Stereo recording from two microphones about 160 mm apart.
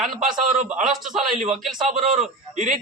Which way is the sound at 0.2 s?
45° right (ahead or behind).